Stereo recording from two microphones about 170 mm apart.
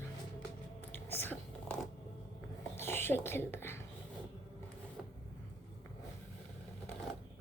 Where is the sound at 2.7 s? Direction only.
15° left (ahead or behind).